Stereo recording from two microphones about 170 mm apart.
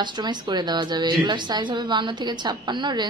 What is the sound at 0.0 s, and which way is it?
A woman's voice, 25° right (ahead or behind).